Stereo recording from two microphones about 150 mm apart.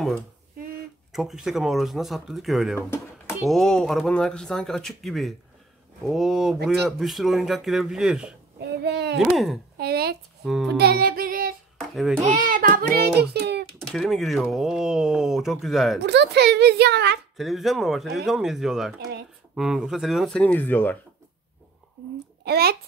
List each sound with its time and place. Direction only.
1.1 s speech: 5° right (ahead or behind)
8.5 s a sound: 90° right
9.8 s speech: 90° right
10.4 s child singing: 5° right (ahead or behind)
10.8 s music: 90° right
11.9 s a child's voice: centre (ahead or behind)
12.2 s speech: 65° right (ahead or behind); by 13.7 s 90° right
13.7 s speech: centre (ahead or behind)
16.3 s a child's voice: 90° right
17.4 s speech: centre (ahead or behind)
22.4 s a child's voice: 90° right